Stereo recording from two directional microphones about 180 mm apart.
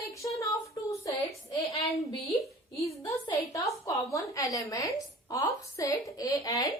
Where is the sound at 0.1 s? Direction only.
15° left (ahead or behind).